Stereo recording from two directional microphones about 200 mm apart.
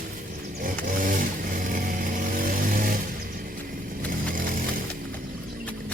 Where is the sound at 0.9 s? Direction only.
45° right (ahead or behind).